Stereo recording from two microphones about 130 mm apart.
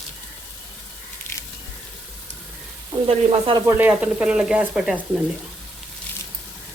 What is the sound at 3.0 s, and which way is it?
Frying, 40° right (ahead or behind).